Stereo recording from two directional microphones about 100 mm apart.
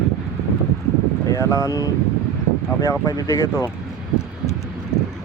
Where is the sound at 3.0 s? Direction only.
30° left (ahead or behind).